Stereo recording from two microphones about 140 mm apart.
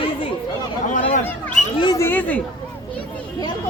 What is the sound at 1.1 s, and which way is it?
Speech, 60° left (ahead or behind).